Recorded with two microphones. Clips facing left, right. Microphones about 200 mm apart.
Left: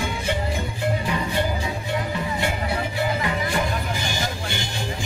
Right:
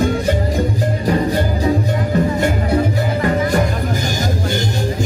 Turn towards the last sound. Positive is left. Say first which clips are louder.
# right 8 dB
turn(degrees=-40)  # may be behind; listen again after turning